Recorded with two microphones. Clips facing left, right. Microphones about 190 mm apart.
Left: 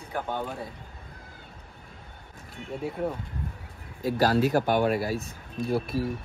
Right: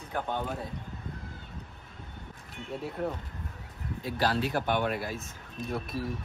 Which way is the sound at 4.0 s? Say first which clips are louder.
Left 6 dB; 45° left (ahead or behind).